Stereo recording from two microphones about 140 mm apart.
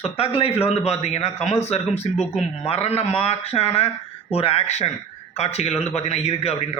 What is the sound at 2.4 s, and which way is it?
A man's voice, 45° left (ahead or behind).